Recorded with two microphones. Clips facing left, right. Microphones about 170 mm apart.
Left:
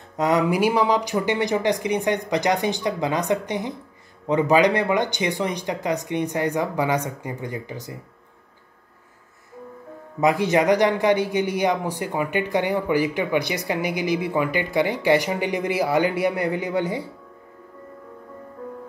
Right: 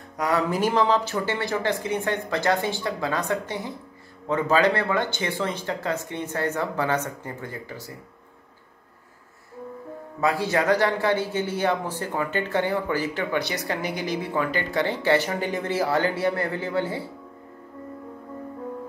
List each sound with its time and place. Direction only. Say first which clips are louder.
0.2 s a man's voice: left 4 dB; 20° left (ahead or behind)
10.2 s a man's voice: left 4 dB; 20° left (ahead or behind)